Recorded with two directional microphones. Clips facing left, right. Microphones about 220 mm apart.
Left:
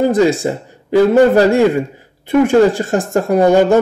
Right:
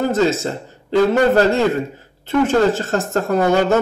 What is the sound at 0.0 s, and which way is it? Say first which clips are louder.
Speech: left 5 dB; 15° left (ahead or behind).